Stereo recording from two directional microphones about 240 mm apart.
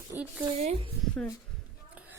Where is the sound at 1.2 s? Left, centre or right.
Centre.